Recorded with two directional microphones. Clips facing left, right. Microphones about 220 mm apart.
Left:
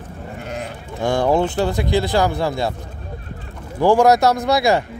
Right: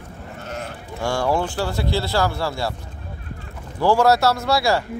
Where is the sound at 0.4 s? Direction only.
15° left (ahead or behind).